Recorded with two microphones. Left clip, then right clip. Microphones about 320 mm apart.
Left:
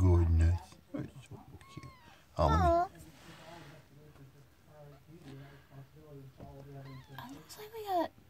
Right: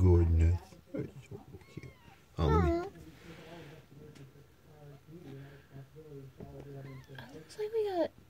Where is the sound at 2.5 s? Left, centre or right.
Left.